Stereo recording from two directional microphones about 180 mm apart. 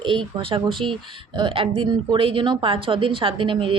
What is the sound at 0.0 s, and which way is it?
Speech, 25° right (ahead or behind).